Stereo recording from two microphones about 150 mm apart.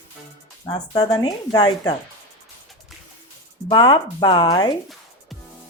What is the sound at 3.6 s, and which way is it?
Speech, 30° left (ahead or behind).